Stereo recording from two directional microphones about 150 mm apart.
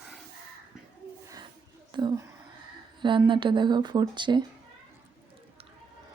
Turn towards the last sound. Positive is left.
turn(degrees=-30)  # may be behind; listen again after turning